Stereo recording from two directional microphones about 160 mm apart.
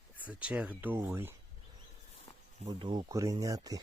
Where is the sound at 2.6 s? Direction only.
30° right (ahead or behind).